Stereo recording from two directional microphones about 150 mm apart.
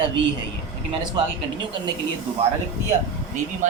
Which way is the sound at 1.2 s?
30° right (ahead or behind).